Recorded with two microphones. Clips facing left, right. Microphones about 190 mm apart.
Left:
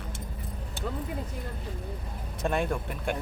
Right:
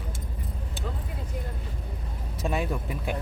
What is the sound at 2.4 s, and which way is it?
Speech, centre (ahead or behind).